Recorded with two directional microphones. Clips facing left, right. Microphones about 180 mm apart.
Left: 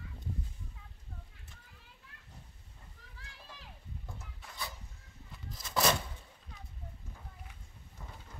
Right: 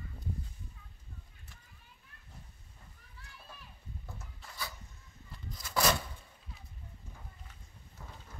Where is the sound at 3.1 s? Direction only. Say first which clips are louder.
Even; 90° left.